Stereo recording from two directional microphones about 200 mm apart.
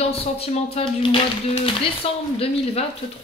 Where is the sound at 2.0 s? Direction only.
30° left (ahead or behind).